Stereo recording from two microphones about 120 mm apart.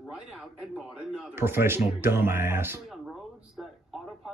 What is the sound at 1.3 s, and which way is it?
Speech, 20° right (ahead or behind).